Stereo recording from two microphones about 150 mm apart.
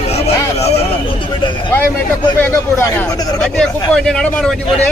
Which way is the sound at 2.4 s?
20° left (ahead or behind).